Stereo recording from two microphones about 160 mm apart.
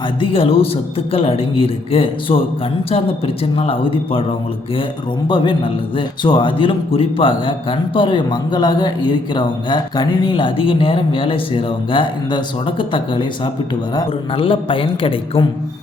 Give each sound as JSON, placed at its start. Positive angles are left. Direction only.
{"t": 0.2, "sound": "a man's voice", "side_deg": 35}
{"t": 5.3, "sound": "a man's voice", "side_deg": 30}